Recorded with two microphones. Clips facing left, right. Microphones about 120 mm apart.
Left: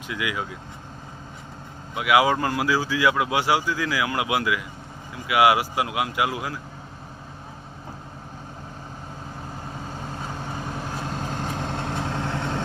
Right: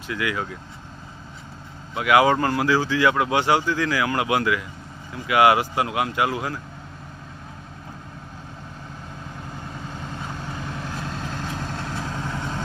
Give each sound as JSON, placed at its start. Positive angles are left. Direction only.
{"t": 0.1, "sound": "speech", "side_deg": 15}
{"t": 2.0, "sound": "speech", "side_deg": 10}
{"t": 10.6, "sound": "vehicle", "side_deg": 40}